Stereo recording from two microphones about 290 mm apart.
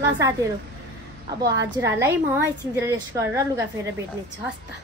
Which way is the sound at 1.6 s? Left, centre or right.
Centre.